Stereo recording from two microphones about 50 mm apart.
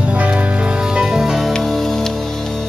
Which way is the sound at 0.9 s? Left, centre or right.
Centre.